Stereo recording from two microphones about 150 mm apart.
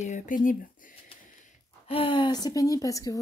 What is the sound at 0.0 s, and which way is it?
Speech, 60° left (ahead or behind).